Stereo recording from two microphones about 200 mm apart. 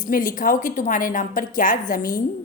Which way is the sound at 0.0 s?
40° left (ahead or behind).